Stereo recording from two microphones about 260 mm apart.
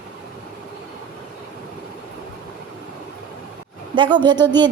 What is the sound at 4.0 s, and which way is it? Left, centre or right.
Speech, centre.